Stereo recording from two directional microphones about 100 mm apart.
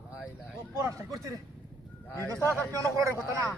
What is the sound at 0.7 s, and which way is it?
Speech, 35° right (ahead or behind).